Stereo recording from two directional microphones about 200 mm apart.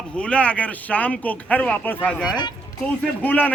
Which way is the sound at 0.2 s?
5° left (ahead or behind).